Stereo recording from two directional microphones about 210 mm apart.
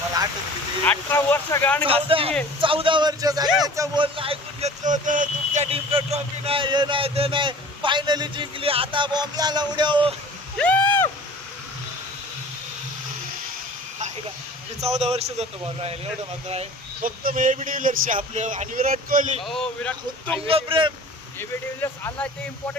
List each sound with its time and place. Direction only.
0.9 s speech: 10° left (ahead or behind)
1.8 s speech: 25° right (ahead or behind)
10.6 s speech: 10° left (ahead or behind)
14.8 s a man's voice: 30° right (ahead or behind)
19.4 s speech: centre (ahead or behind)
20.5 s speech: 25° right (ahead or behind)
21.3 s speech: 10° left (ahead or behind)